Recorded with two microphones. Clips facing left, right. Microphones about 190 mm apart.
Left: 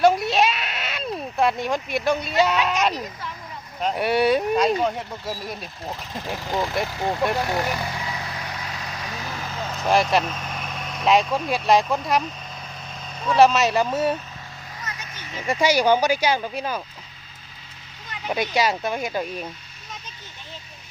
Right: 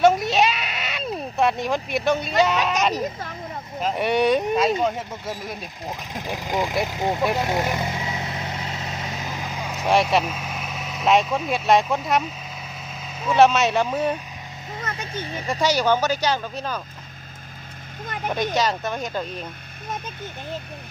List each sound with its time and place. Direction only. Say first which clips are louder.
0.0 s a sound: right 1 dB; centre (ahead or behind)
3.8 s speech: even; centre (ahead or behind)
5.8 s speech: even; 15° right (ahead or behind)
7.3 s vehicle: right 1 dB; 20° right (ahead or behind)
9.9 s speech: even; centre (ahead or behind)
15.4 s speech: left 2 dB; 10° left (ahead or behind)
18.0 s vehicle: right 7 dB; 50° right (ahead or behind)
18.5 s speech: left 1 dB; 10° left (ahead or behind)